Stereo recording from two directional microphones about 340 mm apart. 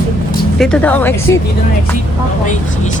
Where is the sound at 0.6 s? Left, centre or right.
Centre.